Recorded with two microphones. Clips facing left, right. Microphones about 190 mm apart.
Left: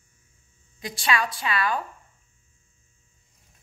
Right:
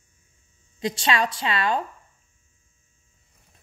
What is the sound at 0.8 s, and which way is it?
A woman's voice, 30° right (ahead or behind).